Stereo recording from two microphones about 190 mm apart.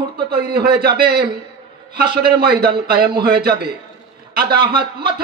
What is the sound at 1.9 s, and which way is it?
Speech, 55° right (ahead or behind).